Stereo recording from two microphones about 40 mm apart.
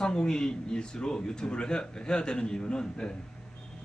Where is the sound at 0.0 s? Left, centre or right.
Centre.